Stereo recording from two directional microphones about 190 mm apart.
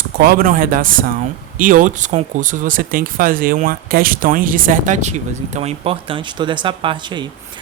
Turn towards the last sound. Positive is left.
turn(degrees=-25)  # may be behind; listen again after turning